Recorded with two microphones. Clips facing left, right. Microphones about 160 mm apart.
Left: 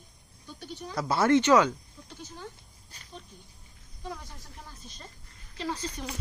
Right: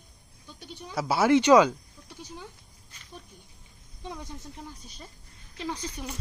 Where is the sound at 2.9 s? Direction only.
35° left (ahead or behind).